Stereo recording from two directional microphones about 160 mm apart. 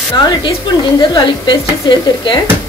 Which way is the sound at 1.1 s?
30° left (ahead or behind).